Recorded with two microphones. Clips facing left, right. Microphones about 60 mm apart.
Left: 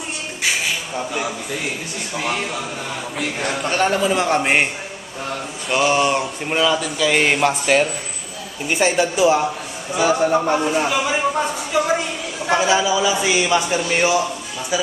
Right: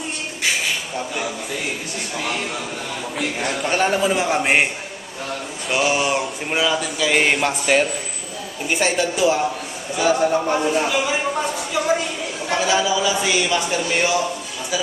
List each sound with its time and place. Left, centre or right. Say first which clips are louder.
0.9 s a man's voice: left 2 dB; centre
3.2 s a man's voice: even; centre
12.5 s a man's voice: left 3 dB; centre